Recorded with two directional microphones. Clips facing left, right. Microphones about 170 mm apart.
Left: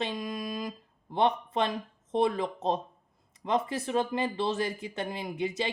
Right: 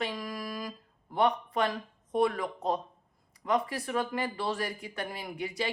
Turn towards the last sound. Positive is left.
turn(degrees=25)  # may be behind; listen again after turning